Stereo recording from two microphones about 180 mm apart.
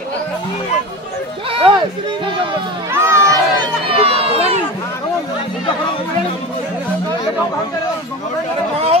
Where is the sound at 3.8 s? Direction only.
30° right (ahead or behind).